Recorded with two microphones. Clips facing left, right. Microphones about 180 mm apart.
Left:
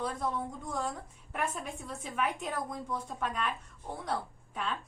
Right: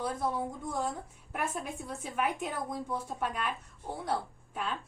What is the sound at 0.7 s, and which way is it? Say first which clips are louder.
A woman's voice: right 1 dB; 5° right (ahead or behind).